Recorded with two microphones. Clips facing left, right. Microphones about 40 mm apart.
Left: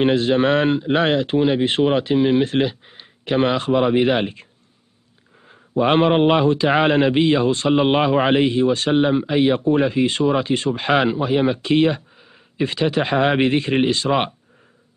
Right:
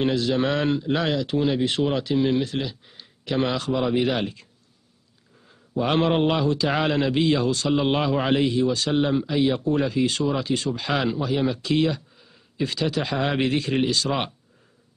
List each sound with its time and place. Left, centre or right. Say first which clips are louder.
0.0 s a man's voice: left 6 dB; left
5.5 s a man's voice: left 6 dB; left